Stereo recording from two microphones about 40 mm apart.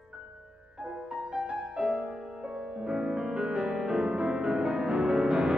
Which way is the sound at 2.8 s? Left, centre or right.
Right.